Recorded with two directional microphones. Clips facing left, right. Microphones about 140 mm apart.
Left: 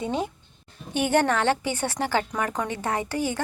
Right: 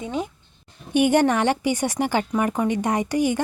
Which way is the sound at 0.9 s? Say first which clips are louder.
Right 4 dB; 15° right (ahead or behind).